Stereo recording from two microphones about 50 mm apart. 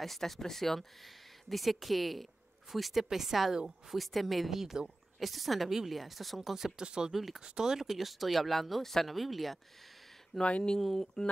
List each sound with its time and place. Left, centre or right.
0.0 s speech: centre
6.5 s speech: centre
7.1 s speech: centre
10.4 s speech: centre
10.8 s speech: centre